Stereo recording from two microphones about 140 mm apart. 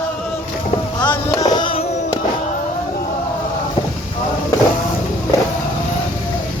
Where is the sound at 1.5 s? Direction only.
40° left (ahead or behind).